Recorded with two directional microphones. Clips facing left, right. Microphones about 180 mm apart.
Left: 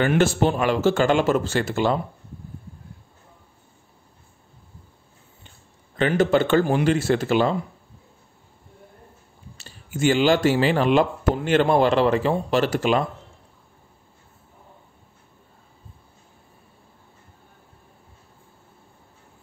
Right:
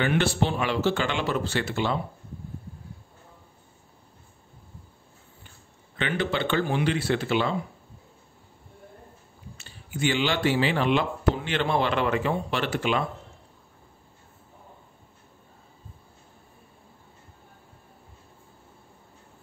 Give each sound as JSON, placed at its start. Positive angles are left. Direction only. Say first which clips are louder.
{"t": 0.0, "sound": "speech", "louder": "left 5 dB", "side_deg": 45}
{"t": 5.9, "sound": "speech", "louder": "left 8 dB", "side_deg": 40}
{"t": 9.6, "sound": "speech", "louder": "left 5 dB", "side_deg": 40}